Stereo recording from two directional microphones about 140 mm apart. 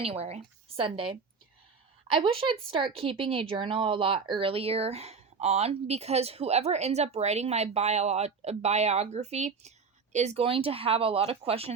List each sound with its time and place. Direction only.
0.0 s a woman's voice: 45° right (ahead or behind)
10.4 s speech: 40° right (ahead or behind)